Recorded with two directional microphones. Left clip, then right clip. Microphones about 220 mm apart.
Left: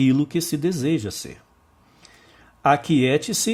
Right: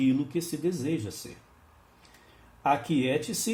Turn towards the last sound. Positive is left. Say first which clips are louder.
# left 8 dB
turn(degrees=50)  # may be behind; listen again after turning